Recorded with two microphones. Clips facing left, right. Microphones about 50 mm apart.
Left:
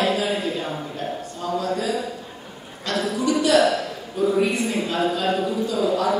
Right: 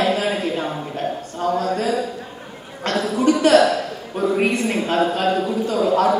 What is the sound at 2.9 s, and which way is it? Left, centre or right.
A man's voice, right.